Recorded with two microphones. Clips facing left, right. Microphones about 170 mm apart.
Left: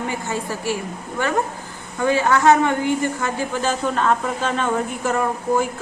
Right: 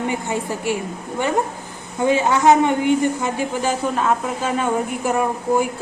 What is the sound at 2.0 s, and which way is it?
Speech, 20° right (ahead or behind).